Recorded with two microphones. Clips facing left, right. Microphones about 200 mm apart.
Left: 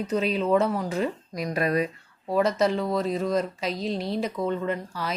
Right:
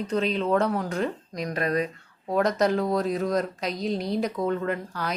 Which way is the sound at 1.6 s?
35° right (ahead or behind).